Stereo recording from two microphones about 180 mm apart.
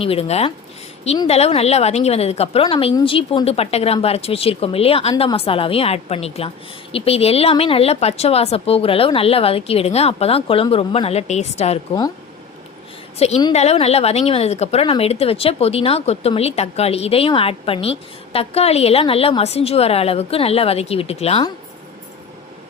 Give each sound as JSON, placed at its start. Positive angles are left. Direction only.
{"t": 0.0, "sound": "a woman's voice", "side_deg": 35}
{"t": 13.1, "sound": "a woman's voice", "side_deg": 35}